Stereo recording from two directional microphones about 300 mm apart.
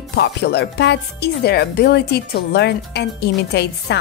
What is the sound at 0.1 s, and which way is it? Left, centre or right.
Speech, left.